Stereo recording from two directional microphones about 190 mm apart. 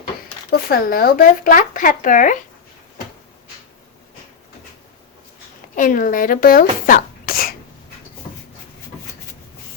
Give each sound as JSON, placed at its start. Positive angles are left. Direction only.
{"t": 0.7, "sound": "speech", "side_deg": 50}
{"t": 5.7, "sound": "speech", "side_deg": 45}